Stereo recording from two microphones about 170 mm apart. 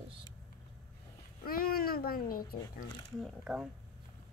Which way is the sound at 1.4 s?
60° left (ahead or behind).